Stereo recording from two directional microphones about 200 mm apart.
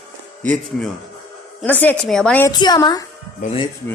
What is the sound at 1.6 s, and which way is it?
Speech, 10° left (ahead or behind).